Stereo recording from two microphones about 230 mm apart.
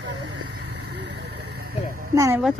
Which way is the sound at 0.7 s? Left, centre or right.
Right.